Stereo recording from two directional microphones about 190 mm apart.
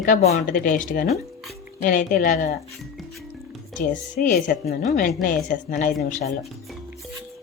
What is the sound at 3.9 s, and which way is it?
A woman's voice, 45° left (ahead or behind).